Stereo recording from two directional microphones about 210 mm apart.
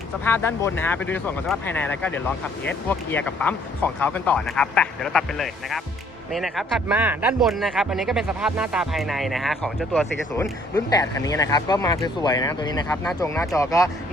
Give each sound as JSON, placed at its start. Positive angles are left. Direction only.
{"t": 0.3, "sound": "speech", "side_deg": 10}